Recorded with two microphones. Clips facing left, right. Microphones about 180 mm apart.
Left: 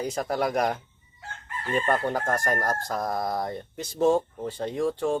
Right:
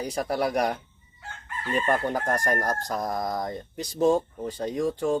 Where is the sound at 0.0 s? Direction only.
10° right (ahead or behind).